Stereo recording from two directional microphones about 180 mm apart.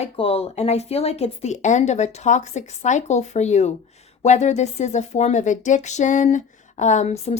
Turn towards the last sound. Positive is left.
turn(degrees=35)  # may be behind; listen again after turning